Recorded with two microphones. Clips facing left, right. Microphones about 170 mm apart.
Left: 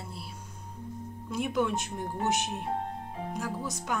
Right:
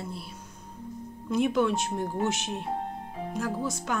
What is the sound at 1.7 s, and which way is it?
Speech, 75° right (ahead or behind).